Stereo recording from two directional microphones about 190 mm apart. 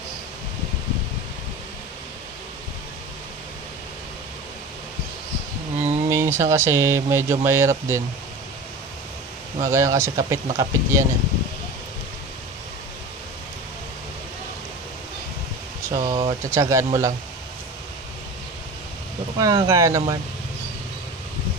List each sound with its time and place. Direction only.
6.0 s speech: 15° right (ahead or behind)
9.6 s speech: 15° right (ahead or behind)
15.9 s speech: 25° right (ahead or behind)
16.4 s speech: 15° right (ahead or behind)
19.3 s speech: 20° right (ahead or behind)